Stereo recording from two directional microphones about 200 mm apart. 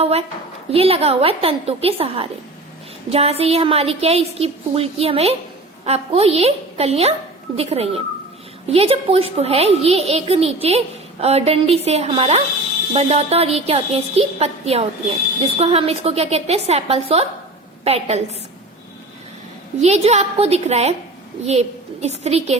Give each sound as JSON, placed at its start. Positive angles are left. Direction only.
{"t": 0.0, "sound": "a child's voice", "side_deg": -30}
{"t": 19.8, "sound": "a child's voice", "side_deg": -35}